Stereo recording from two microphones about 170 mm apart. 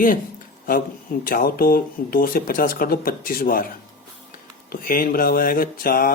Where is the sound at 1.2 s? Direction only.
55° left (ahead or behind).